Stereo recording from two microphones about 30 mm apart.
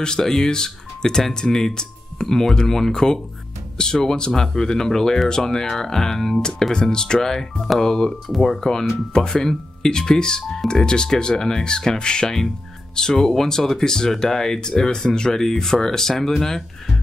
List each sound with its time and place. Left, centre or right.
0.0 s speech: left
6.7 s speech: left
12.9 s speech: centre
14.9 s speech: left
15.3 s speech: centre